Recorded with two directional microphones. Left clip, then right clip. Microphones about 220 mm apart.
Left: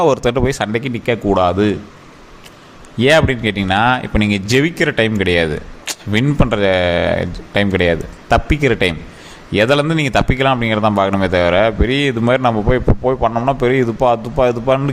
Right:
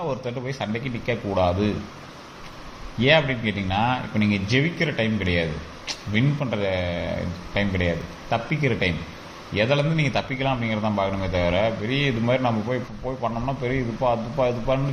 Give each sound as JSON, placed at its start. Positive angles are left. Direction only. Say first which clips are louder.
{"t": 0.0, "sound": "a man's voice", "louder": "left 15 dB", "side_deg": 55}
{"t": 3.0, "sound": "a man's voice", "louder": "left 7 dB", "side_deg": 45}